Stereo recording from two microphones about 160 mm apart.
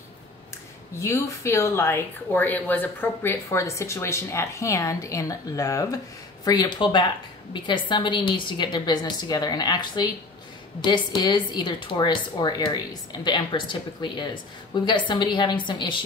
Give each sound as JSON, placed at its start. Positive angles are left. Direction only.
{"t": 0.9, "sound": "speech", "side_deg": 20}